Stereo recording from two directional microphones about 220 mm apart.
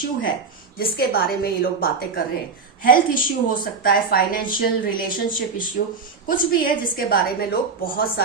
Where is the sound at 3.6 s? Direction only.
40° left (ahead or behind).